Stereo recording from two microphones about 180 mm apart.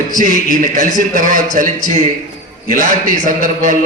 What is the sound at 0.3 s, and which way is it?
Speech, 45° left (ahead or behind).